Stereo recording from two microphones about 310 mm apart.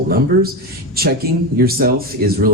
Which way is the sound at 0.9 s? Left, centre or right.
Right.